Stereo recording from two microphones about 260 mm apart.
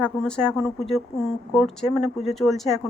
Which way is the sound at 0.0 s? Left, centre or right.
Centre.